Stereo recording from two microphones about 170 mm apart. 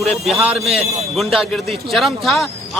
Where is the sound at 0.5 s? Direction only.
35° right (ahead or behind).